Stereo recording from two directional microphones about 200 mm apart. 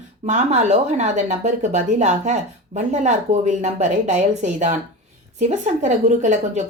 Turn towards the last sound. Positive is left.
turn(degrees=-35)  # may be behind; listen again after turning